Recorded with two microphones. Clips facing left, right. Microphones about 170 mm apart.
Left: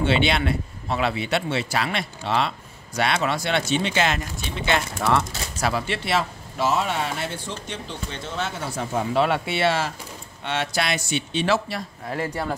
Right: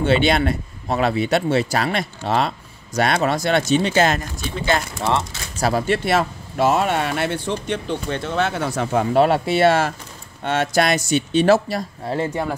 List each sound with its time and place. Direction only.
0.0 s speech: 45° right (ahead or behind)
5.0 s speech: 25° right (ahead or behind)
5.7 s speech: 45° right (ahead or behind); by 9.0 s 70° right (ahead or behind)
9.1 s speech: 40° right (ahead or behind)
12.1 s speech: 25° right (ahead or behind)